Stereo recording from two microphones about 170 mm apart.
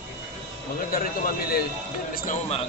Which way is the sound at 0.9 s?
60° left (ahead or behind).